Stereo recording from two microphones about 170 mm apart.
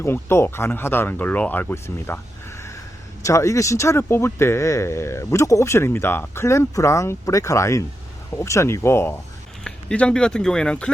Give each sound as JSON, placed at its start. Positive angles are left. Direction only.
{"t": 0.0, "sound": "speech", "side_deg": 15}